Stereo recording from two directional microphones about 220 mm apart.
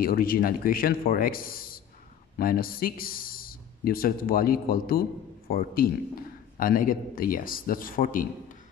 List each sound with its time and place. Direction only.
0.0 s speech: 40° left (ahead or behind)